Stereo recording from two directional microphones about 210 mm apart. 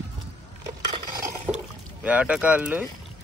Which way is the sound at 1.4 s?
5° right (ahead or behind).